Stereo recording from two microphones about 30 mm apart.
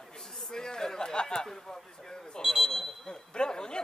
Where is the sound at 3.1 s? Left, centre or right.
Left.